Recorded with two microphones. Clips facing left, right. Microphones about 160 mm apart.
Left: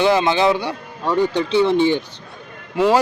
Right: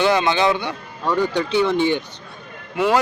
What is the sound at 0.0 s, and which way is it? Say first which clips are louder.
A man's voice: left 2 dB; 30° left (ahead or behind).